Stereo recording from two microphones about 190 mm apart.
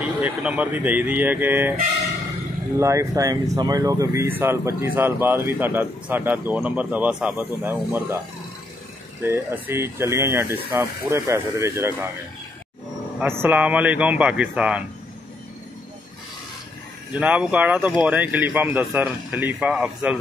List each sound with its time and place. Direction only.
0.0 s speech: 5° right (ahead or behind)
2.8 s speech: 15° right (ahead or behind)
9.2 s speech: 10° right (ahead or behind)
13.2 s speech: 10° right (ahead or behind)
17.1 s speech: 5° right (ahead or behind)